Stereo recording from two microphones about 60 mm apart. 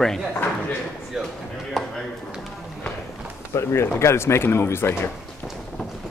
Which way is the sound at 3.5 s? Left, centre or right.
Left.